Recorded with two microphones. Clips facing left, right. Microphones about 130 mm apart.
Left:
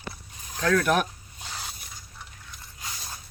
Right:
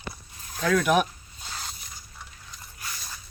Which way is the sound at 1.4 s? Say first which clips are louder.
Even; 10° left (ahead or behind).